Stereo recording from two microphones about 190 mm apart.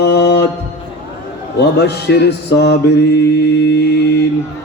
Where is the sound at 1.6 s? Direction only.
60° left (ahead or behind).